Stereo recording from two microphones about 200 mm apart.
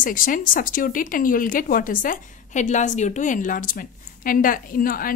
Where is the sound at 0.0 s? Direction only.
45° left (ahead or behind).